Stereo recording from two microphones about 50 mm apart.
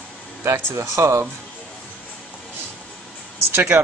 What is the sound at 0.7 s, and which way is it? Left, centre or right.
Speech, right.